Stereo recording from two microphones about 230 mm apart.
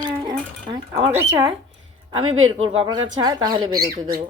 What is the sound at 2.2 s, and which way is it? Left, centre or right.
Speech, right.